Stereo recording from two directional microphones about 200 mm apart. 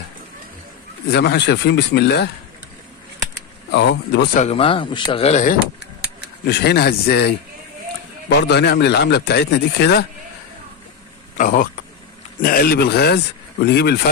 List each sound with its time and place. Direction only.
1.1 s a man's voice: 55° left (ahead or behind)
3.7 s a man's voice: 60° left (ahead or behind)
4.4 s speech: 30° left (ahead or behind)
6.4 s a man's voice: 55° left (ahead or behind)
11.3 s a man's voice: 45° left (ahead or behind)